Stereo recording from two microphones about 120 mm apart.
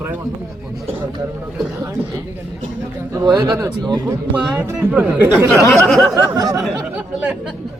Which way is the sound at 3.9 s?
30° right (ahead or behind).